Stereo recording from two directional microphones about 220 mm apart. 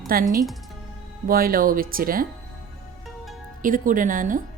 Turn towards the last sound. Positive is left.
turn(degrees=-40)  # may be behind; listen again after turning